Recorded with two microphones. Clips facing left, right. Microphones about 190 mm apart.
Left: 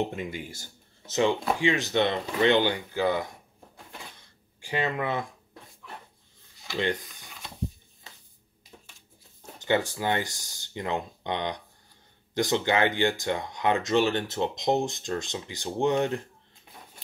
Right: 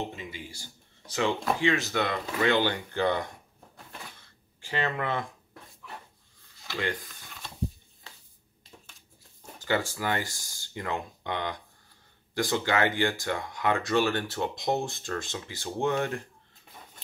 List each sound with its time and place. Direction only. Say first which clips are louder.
0.1 s speech: left 6 dB; 50° left (ahead or behind)
1.0 s speech: left 3 dB; 20° left (ahead or behind)
3.7 s cash register: even; 10° left (ahead or behind)
6.7 s speech: left 4 dB; 20° left (ahead or behind)
9.6 s speech: left 3 dB; 20° left (ahead or behind)